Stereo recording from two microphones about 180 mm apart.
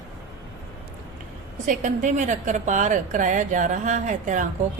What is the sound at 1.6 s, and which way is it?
A woman's voice, 45° right (ahead or behind).